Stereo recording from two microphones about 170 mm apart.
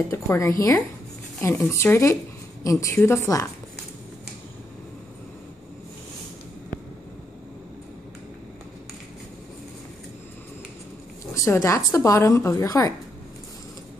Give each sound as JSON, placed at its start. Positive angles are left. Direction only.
{"t": 0.1, "sound": "speech", "side_deg": 15}
{"t": 11.3, "sound": "speech", "side_deg": 15}